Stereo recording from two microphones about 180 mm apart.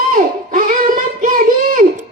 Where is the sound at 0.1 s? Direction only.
45° right (ahead or behind).